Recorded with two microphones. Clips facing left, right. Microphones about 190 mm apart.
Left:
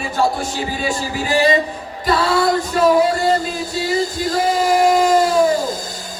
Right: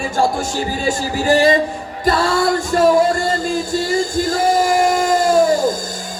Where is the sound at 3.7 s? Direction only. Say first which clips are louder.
Even; 45° right (ahead or behind).